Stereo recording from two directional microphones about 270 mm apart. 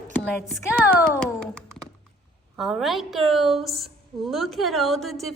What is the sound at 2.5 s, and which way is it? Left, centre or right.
A woman's voice, centre.